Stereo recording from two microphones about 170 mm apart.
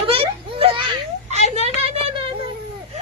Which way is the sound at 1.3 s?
40° right (ahead or behind).